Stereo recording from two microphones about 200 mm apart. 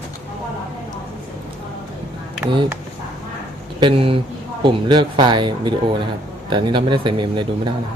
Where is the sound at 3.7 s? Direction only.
25° right (ahead or behind).